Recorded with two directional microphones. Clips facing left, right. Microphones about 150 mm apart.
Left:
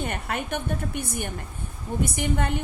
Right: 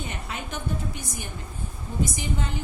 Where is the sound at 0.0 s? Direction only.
60° left (ahead or behind).